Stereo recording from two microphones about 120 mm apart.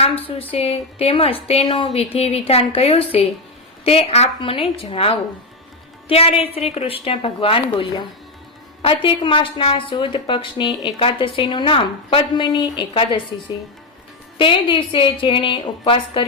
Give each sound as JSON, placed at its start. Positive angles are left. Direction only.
{"t": 0.0, "sound": "a woman's voice", "side_deg": 55}
{"t": 14.3, "sound": "a woman's voice", "side_deg": 45}